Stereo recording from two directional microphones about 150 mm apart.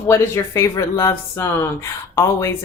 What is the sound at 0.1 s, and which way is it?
Speech, 20° left (ahead or behind).